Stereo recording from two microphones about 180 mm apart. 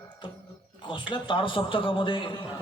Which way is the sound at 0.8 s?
25° left (ahead or behind).